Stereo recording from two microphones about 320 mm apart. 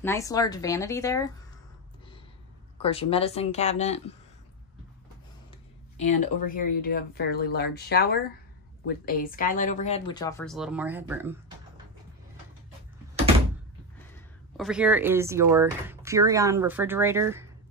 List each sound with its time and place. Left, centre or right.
0.0 s speech: centre
2.8 s speech: centre
5.9 s speech: left; by 11.8 s centre
14.1 s speech: centre